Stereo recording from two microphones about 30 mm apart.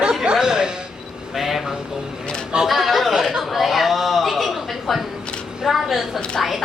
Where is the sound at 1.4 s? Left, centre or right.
Centre.